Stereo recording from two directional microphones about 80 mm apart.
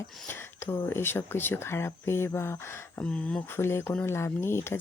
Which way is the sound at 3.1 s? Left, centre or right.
Centre.